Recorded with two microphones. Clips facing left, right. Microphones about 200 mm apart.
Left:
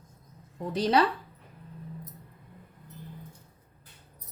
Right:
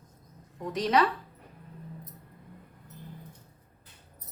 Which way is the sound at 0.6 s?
30° left (ahead or behind).